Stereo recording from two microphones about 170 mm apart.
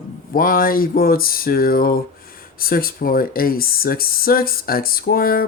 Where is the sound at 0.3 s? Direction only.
55° left (ahead or behind).